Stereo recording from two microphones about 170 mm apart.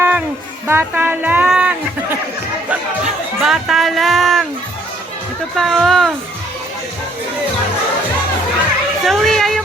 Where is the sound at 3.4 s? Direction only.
Centre (ahead or behind).